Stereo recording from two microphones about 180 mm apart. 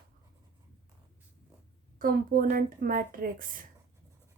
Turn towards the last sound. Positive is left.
turn(degrees=-50)  # may be behind; listen again after turning